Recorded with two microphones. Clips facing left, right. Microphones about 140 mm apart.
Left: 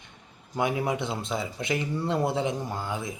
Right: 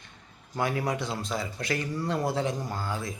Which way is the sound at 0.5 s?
20° left (ahead or behind).